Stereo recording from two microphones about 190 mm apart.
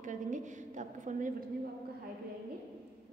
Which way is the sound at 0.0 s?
40° right (ahead or behind).